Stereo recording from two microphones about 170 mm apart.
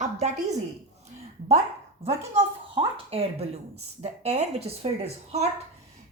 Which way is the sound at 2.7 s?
35° right (ahead or behind).